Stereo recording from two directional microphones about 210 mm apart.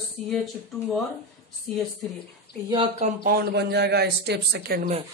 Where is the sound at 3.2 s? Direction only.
50° right (ahead or behind).